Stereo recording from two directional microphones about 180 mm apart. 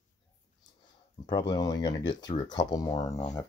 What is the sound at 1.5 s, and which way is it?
Speech, 25° left (ahead or behind).